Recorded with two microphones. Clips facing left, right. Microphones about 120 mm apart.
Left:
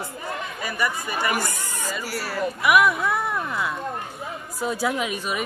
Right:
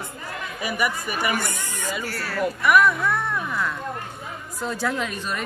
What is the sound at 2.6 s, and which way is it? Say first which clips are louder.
Speech: even; 5° left (ahead or behind).